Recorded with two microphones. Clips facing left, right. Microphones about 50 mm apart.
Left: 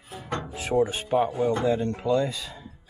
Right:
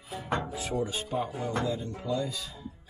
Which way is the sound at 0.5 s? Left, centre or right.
Left.